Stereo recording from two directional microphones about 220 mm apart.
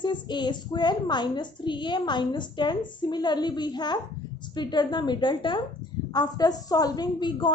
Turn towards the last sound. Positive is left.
turn(degrees=20)  # may be behind; listen again after turning